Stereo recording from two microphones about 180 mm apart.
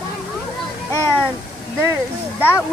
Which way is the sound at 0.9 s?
10° left (ahead or behind).